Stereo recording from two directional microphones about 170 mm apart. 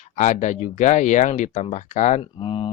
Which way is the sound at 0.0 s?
45° left (ahead or behind).